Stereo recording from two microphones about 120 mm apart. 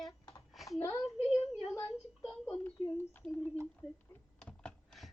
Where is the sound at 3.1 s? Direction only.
15° left (ahead or behind).